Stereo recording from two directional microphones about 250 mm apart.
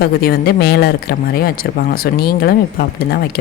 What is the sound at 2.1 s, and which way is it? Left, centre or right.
A woman's voice, left.